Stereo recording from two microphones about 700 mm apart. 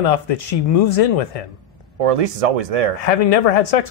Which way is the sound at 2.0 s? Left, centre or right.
Right.